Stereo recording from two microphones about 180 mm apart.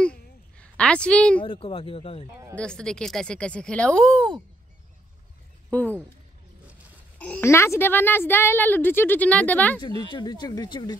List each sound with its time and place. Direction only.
0.0 s a sound: 5° left (ahead or behind)
1.4 s speech: 30° left (ahead or behind)
2.5 s speech: 5° left (ahead or behind)
5.7 s speech: 10° left (ahead or behind)
7.2 s a woman's voice: 10° left (ahead or behind)
9.8 s speech: 30° right (ahead or behind)
10.1 s speech: 25° left (ahead or behind)